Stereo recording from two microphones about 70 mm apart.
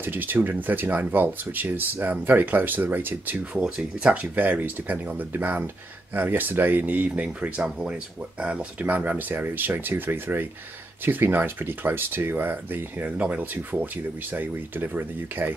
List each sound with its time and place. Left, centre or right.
0.0 s speech: right
3.5 s speech: centre; by 15.5 s right